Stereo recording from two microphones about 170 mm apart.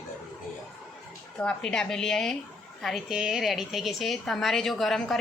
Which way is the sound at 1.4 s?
5° left (ahead or behind).